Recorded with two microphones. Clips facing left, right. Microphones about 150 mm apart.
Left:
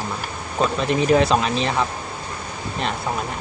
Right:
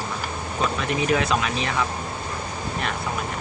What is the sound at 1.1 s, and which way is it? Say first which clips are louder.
Speech: left 6 dB; 30° left (ahead or behind).